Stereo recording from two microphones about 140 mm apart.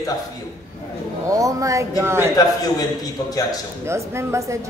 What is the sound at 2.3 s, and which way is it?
Speech, 25° left (ahead or behind).